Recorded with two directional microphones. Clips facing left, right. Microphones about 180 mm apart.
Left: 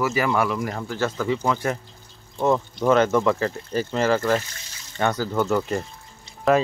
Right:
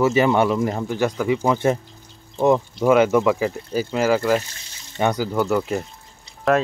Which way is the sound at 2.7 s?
10° right (ahead or behind).